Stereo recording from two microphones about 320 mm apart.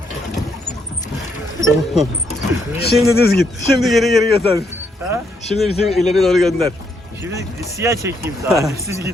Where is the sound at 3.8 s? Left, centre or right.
Centre.